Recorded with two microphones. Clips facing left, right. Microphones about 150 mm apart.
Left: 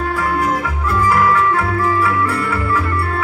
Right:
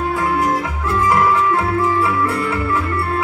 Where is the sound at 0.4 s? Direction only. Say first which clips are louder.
Even; 20° right (ahead or behind).